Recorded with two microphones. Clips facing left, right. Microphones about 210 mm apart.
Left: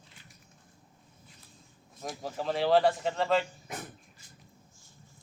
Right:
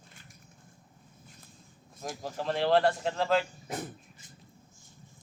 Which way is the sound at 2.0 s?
Centre (ahead or behind).